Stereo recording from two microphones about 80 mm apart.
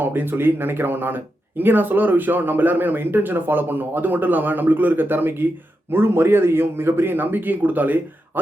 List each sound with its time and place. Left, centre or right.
0.0 s speech: right